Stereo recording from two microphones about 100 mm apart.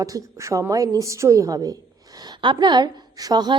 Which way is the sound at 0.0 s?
35° right (ahead or behind).